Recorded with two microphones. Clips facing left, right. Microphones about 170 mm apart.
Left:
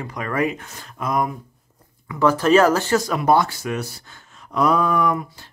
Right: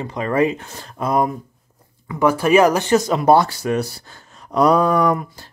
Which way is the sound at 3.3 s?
35° right (ahead or behind).